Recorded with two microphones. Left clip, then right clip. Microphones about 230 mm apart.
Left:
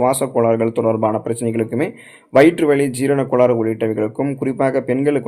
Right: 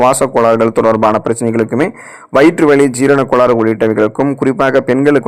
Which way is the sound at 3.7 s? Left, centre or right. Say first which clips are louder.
Right 8 dB; centre.